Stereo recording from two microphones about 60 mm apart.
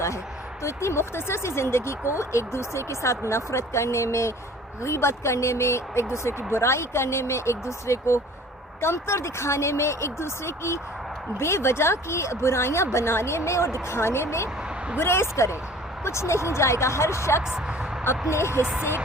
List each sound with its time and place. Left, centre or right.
0.6 s speech: left
18.6 s speech: centre